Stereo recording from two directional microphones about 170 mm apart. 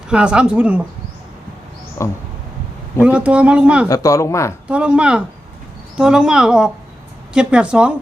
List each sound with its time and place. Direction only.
0.1 s speech: 5° right (ahead or behind)
2.0 s speech: 15° left (ahead or behind)
3.0 s speech: 5° right (ahead or behind)
3.8 s speech: 20° left (ahead or behind)
4.7 s speech: 5° right (ahead or behind)